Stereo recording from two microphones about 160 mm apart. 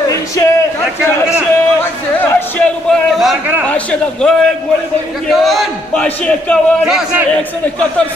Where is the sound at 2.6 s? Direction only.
5° left (ahead or behind).